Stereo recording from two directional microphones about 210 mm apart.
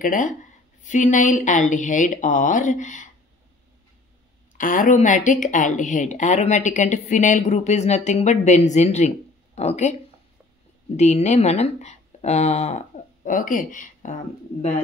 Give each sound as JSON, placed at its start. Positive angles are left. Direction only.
{"t": 0.0, "sound": "speech", "side_deg": 40}
{"t": 4.6, "sound": "speech", "side_deg": 40}
{"t": 11.0, "sound": "speech", "side_deg": 30}